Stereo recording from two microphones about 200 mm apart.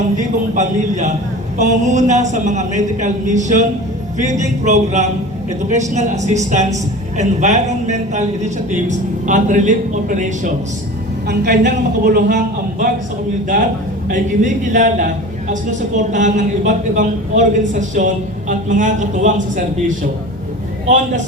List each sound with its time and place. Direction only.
0.2 s a man's voice: 35° right (ahead or behind)
11.3 s a woman's voice: 55° right (ahead or behind)
14.1 s a man's voice: 40° right (ahead or behind)